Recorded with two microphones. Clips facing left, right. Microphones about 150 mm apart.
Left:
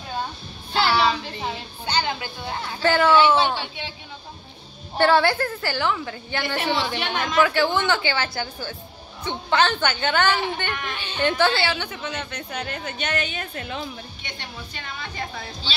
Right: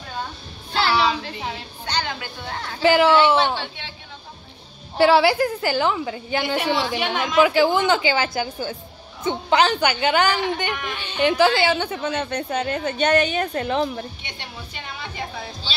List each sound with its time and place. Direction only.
0.7 s music: centre (ahead or behind)
2.8 s a woman's voice: 10° right (ahead or behind)
3.3 s a man's voice: 10° left (ahead or behind)
4.9 s a woman's voice: 5° right (ahead or behind); by 13.7 s 40° right (ahead or behind)